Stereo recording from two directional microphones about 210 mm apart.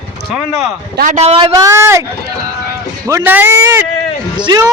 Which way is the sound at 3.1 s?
10° right (ahead or behind).